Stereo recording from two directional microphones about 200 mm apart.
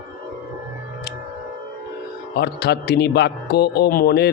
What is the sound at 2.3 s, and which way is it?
Speech, 55° left (ahead or behind).